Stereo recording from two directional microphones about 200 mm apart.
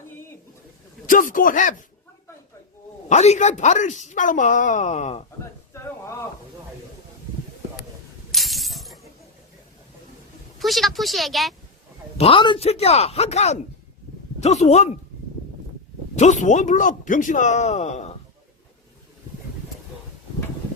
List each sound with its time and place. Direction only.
1.0 s speech: 40° left (ahead or behind)
3.1 s a woman's voice: 35° left (ahead or behind)
5.7 s a sound: 15° left (ahead or behind)
8.3 s glass: centre (ahead or behind)
10.6 s speech: centre (ahead or behind)
12.1 s a woman's voice: 30° left (ahead or behind)
16.1 s a woman's voice: 35° left (ahead or behind)